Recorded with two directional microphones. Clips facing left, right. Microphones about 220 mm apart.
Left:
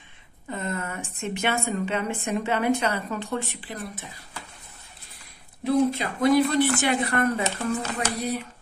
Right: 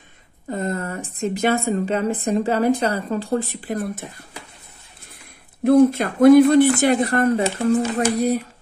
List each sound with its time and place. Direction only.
0.5 s a woman's voice: 35° right (ahead or behind)
5.6 s a woman's voice: 55° right (ahead or behind)